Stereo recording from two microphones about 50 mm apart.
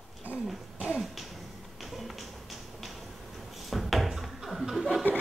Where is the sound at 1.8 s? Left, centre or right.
Centre.